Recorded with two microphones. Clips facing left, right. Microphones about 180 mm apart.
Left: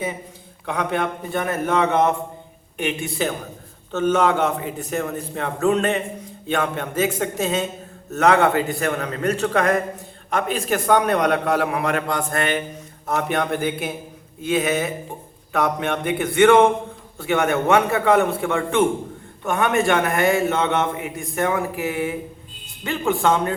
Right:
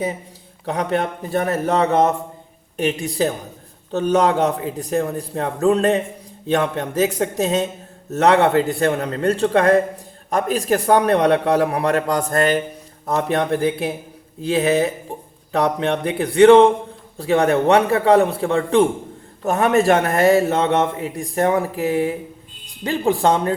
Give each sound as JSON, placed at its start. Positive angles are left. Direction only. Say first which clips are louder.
{"t": 0.6, "sound": "a man's voice", "louder": "right 2 dB", "side_deg": -35}